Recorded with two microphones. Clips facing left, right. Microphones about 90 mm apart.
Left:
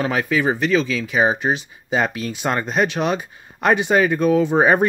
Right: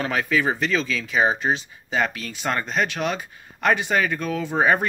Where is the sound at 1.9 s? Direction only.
20° left (ahead or behind).